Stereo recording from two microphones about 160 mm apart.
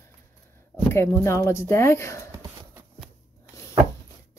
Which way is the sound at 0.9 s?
15° left (ahead or behind).